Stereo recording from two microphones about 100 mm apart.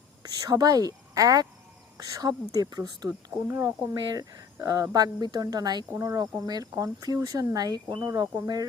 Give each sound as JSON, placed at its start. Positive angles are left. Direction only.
{"t": 0.2, "sound": "speech", "side_deg": -40}
{"t": 3.5, "sound": "speech", "side_deg": -30}